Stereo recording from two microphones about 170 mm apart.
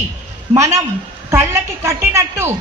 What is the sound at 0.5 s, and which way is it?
A woman's voice, 20° right (ahead or behind).